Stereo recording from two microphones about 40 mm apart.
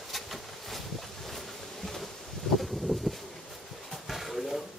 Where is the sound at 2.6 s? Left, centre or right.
Centre.